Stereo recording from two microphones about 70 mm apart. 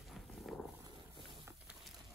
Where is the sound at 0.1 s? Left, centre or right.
Centre.